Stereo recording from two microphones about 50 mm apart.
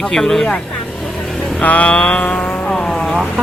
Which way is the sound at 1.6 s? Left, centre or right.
Left.